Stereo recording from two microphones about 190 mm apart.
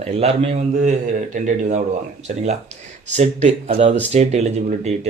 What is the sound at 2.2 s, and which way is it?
Speech, 35° right (ahead or behind).